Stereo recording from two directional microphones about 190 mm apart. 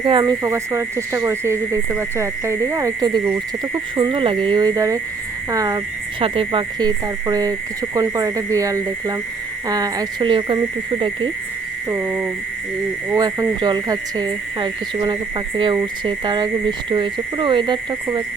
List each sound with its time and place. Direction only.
0.0 s speech: 25° right (ahead or behind)
11.9 s speech: 15° right (ahead or behind)